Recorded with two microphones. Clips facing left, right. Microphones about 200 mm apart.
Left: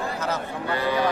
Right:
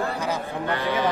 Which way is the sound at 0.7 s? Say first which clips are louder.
Left 1 dB; 10° left (ahead or behind).